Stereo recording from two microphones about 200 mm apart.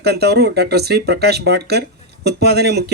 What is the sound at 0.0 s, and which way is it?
Speech, 55° right (ahead or behind).